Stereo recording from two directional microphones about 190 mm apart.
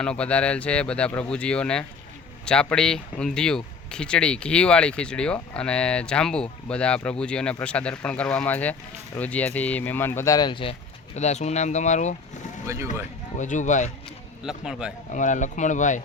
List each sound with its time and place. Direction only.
0.0 s speech: 5° left (ahead or behind); by 12.1 s 40° left (ahead or behind)
12.6 s speech: 15° right (ahead or behind)
13.4 s speech: 40° left (ahead or behind)
14.4 s speech: 5° right (ahead or behind)
15.1 s speech: 40° left (ahead or behind)